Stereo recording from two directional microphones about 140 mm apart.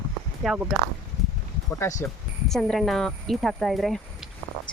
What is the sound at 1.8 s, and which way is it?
Speech, 20° left (ahead or behind).